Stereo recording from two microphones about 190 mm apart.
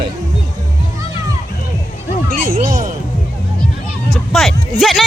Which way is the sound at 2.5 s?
45° right (ahead or behind).